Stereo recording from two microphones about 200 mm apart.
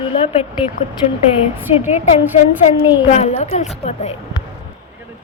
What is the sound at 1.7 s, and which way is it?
Speech, 30° left (ahead or behind).